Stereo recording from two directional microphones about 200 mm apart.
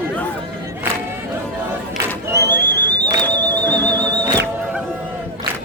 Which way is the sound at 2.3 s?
60° right (ahead or behind).